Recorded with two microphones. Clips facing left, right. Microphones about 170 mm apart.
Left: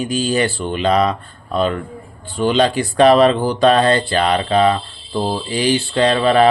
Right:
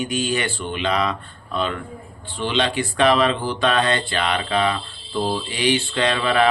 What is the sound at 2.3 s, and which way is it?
Speech, 40° left (ahead or behind).